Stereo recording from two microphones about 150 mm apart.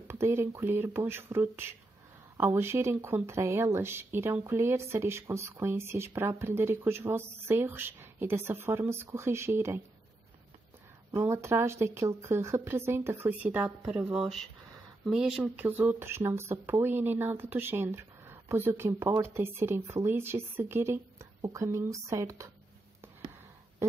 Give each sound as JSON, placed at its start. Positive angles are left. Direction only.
{"t": 0.1, "sound": "speech", "side_deg": -15}
{"t": 11.1, "sound": "speech", "side_deg": -15}